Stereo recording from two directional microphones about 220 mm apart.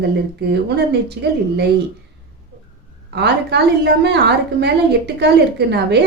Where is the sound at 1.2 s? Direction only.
45° right (ahead or behind).